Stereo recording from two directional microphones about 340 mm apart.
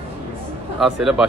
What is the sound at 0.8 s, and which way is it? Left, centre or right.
Speech, centre.